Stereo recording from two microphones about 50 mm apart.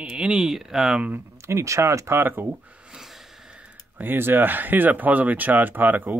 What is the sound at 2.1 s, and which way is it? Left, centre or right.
Speech, right.